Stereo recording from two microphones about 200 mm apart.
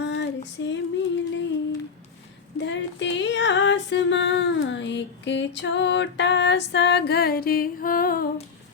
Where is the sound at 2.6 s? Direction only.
65° left (ahead or behind); by 8.3 s 45° left (ahead or behind).